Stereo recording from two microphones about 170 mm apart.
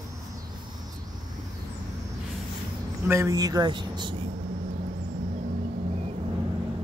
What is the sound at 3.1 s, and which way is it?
Speech, 20° right (ahead or behind).